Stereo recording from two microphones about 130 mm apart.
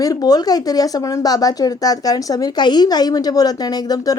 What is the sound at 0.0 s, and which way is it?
A woman's voice, 30° left (ahead or behind).